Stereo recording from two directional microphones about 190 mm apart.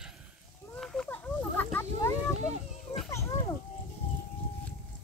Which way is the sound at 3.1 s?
15° left (ahead or behind).